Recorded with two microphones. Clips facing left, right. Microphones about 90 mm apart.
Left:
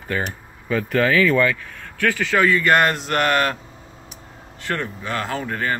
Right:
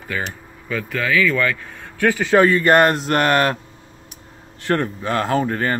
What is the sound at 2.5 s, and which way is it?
Speech, 35° right (ahead or behind).